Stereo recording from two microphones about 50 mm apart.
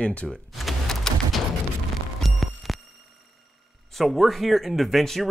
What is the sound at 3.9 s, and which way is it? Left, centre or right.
Speech, centre.